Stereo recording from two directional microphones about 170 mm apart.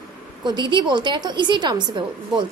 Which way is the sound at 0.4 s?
25° right (ahead or behind).